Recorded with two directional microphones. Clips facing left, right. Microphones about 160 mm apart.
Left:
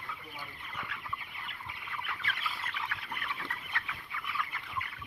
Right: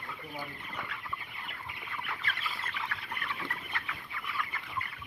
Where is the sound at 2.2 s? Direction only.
Centre (ahead or behind).